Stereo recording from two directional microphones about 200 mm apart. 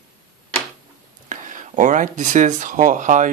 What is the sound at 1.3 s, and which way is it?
Speech, 40° right (ahead or behind).